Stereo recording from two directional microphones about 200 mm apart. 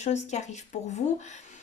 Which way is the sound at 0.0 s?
35° left (ahead or behind).